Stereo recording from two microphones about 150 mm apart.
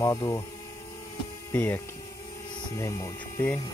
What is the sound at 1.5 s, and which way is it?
Speech, 10° left (ahead or behind).